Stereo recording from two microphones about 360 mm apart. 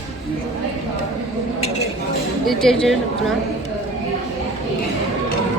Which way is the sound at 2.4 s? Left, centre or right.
Centre.